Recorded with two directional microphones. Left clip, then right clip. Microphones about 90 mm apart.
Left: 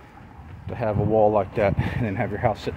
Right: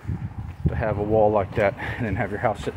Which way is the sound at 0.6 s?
20° left (ahead or behind).